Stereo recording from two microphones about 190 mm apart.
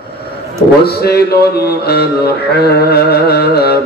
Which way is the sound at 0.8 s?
55° left (ahead or behind).